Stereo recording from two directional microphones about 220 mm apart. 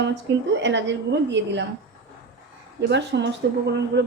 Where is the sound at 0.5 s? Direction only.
55° right (ahead or behind).